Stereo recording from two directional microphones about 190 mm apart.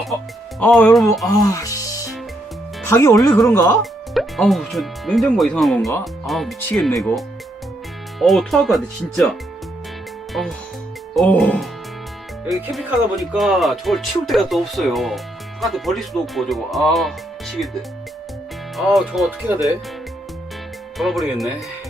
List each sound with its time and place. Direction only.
0.6 s speech: 5° left (ahead or behind)
1.3 s music: 15° left (ahead or behind)
2.8 s speech: 15° left (ahead or behind)
4.1 s speech: centre (ahead or behind)
8.2 s speech: centre (ahead or behind)
11.1 s speech: centre (ahead or behind)
18.8 s speech: centre (ahead or behind)
21.0 s speech: centre (ahead or behind)